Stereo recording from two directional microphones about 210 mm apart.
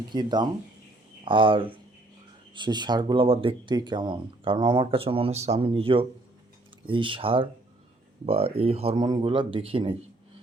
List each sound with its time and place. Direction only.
0.1 s speech: 20° right (ahead or behind)